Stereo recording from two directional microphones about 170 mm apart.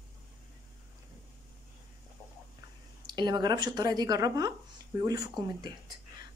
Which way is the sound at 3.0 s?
25° right (ahead or behind).